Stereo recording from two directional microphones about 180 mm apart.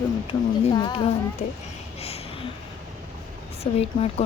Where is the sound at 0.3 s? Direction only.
25° left (ahead or behind).